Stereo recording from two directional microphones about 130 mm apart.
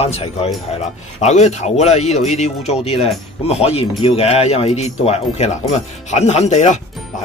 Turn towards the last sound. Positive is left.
turn(degrees=65)  # may be behind; listen again after turning